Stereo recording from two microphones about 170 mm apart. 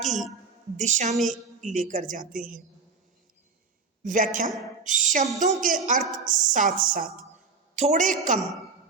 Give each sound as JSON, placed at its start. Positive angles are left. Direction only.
{"t": 0.0, "sound": "a sound", "side_deg": 0}
{"t": 0.8, "sound": "speech", "side_deg": -45}
{"t": 1.1, "sound": "a woman's voice", "side_deg": 0}
{"t": 1.6, "sound": "speech", "side_deg": -50}
{"t": 4.0, "sound": "speech", "side_deg": -50}